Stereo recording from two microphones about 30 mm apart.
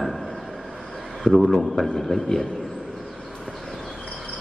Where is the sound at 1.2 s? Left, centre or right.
Centre.